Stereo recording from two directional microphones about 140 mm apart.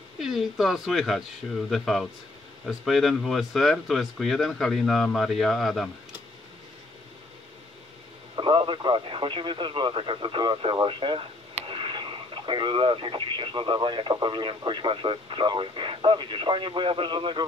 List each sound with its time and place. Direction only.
0.2 s speech: centre (ahead or behind)
8.4 s speech: 40° right (ahead or behind)